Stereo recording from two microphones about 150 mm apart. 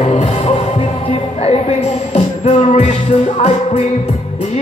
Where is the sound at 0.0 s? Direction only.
50° left (ahead or behind).